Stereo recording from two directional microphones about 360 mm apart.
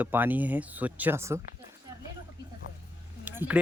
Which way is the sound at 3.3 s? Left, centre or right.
Centre.